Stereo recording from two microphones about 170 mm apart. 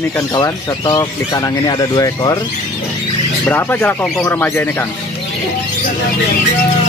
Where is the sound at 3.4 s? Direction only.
10° left (ahead or behind).